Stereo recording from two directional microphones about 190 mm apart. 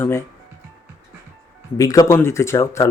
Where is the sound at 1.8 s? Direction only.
15° left (ahead or behind).